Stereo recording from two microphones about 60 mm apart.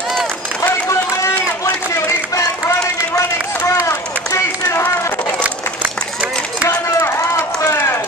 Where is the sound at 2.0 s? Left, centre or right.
Left.